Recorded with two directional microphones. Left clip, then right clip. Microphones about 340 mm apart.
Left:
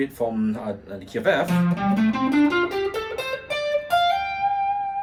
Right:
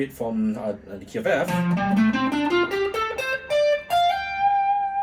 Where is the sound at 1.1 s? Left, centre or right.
Centre.